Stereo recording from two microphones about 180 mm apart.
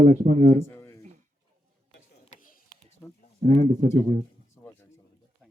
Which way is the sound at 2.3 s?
40° left (ahead or behind).